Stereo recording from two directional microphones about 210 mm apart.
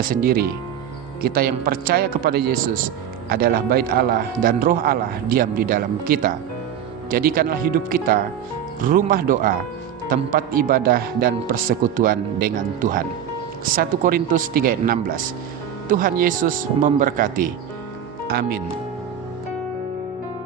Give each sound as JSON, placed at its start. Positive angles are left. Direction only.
{"t": 0.0, "sound": "speech", "side_deg": -45}